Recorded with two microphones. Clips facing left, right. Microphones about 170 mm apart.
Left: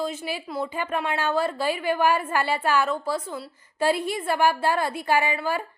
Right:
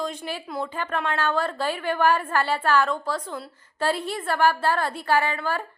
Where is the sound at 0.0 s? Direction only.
5° left (ahead or behind).